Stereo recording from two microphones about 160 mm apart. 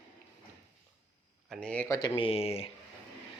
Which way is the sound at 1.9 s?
25° left (ahead or behind).